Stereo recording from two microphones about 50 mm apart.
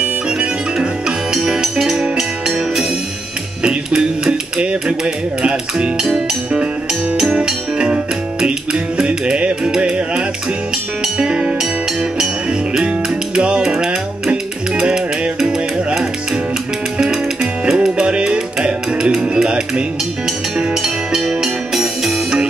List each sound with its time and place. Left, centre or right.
0.7 s music: centre
4.3 s speech: right
6.0 s music: centre
17.0 s music: centre